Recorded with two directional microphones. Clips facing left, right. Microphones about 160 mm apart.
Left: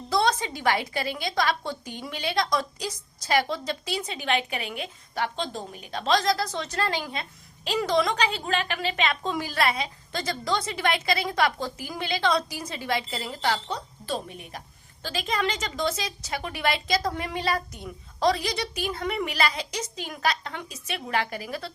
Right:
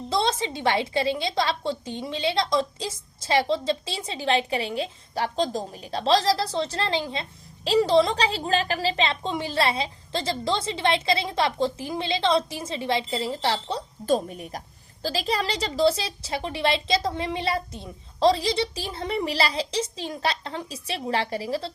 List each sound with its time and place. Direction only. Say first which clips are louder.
0.1 s a woman's voice: left 1 dB; 25° right (ahead or behind)